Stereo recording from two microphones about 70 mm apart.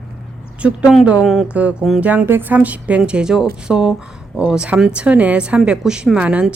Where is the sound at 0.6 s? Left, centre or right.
Centre.